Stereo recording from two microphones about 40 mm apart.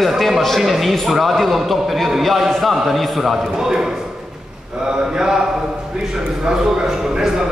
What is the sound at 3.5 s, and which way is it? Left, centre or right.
A man's voice, centre.